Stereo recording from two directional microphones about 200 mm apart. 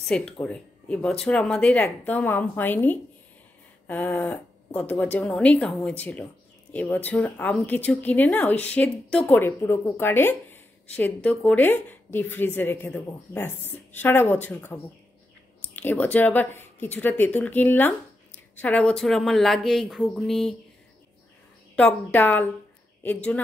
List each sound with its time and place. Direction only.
0.0 s a woman's voice: 5° left (ahead or behind)
21.7 s a woman's voice: 10° left (ahead or behind)